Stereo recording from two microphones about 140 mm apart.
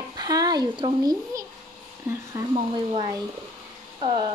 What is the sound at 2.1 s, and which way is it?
Speech, 20° right (ahead or behind).